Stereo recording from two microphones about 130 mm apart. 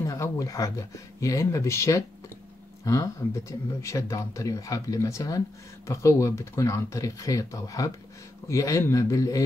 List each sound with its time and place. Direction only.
0.0 s speech: 25° left (ahead or behind)